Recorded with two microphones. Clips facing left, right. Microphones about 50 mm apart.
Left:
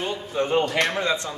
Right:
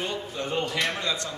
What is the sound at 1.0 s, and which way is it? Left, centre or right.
Speech, left.